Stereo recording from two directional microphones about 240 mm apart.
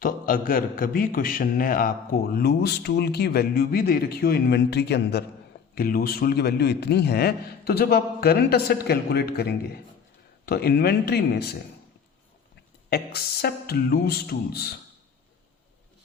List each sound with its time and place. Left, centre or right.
0.0 s a man's voice: left
12.9 s a man's voice: left